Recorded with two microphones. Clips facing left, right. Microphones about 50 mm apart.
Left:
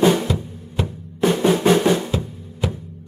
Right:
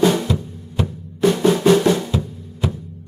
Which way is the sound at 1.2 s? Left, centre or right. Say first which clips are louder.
Right 2 dB; centre.